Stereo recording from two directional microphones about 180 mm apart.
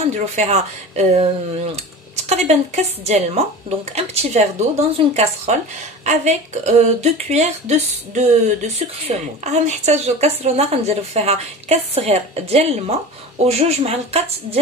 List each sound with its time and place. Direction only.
0.0 s a woman's voice: 35° right (ahead or behind)
9.4 s a woman's voice: 40° right (ahead or behind)